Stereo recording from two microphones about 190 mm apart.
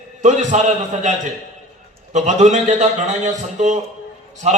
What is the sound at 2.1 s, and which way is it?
Speech, 40° right (ahead or behind).